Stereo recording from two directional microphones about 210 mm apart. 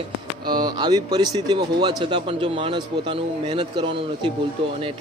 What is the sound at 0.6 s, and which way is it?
Speech, 20° right (ahead or behind).